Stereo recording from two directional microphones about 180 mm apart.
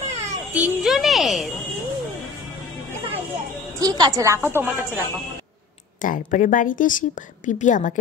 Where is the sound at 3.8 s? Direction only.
20° right (ahead or behind).